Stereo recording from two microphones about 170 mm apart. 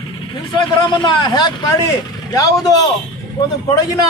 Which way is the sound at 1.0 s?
25° left (ahead or behind).